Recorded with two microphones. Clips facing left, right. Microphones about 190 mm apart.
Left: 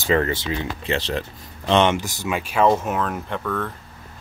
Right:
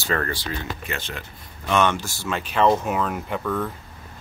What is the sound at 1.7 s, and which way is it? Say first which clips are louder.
Speech: left 3 dB; 20° left (ahead or behind).